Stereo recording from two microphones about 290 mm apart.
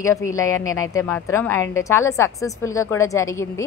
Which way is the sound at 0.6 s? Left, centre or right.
Left.